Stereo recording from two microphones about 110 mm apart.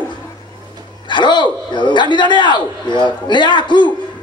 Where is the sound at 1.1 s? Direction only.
45° left (ahead or behind).